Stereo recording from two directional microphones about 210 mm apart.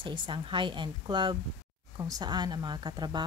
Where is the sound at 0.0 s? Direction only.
25° right (ahead or behind).